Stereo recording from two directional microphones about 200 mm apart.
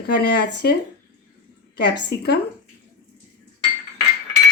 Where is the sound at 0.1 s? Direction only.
55° left (ahead or behind).